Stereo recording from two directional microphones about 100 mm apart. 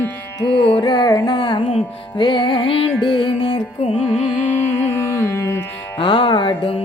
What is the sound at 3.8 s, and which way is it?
Carnatic music, 90° left.